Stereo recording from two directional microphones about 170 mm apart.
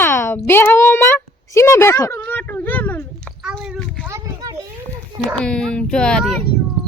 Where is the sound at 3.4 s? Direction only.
5° right (ahead or behind).